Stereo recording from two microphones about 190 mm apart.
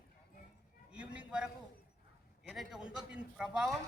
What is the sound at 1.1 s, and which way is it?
A man's voice, 5° right (ahead or behind).